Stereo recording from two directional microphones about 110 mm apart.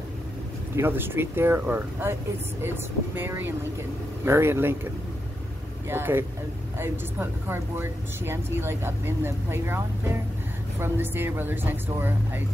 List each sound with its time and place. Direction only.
0.7 s speech: 20° right (ahead or behind)
5.9 s speech: 20° right (ahead or behind)